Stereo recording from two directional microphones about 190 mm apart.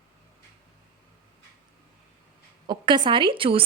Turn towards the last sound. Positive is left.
turn(degrees=-30)  # may be behind; listen again after turning